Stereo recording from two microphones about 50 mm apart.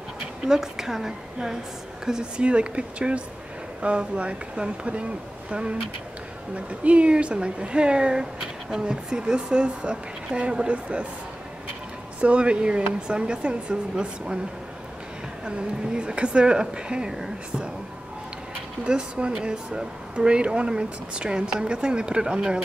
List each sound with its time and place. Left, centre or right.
0.5 s a woman's voice: centre
12.2 s a woman's voice: right
15.4 s a woman's voice: centre
18.9 s a woman's voice: centre